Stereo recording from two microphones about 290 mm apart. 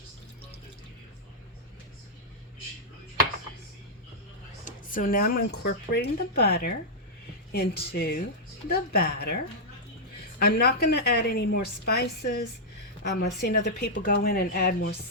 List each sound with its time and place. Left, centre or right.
4.9 s a woman's voice: left
10.4 s a woman's voice: left